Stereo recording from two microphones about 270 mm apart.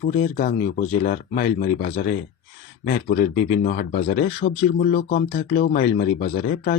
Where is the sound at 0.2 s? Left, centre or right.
Left.